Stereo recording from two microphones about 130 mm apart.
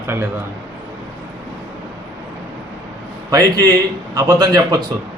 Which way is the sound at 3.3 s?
30° right (ahead or behind).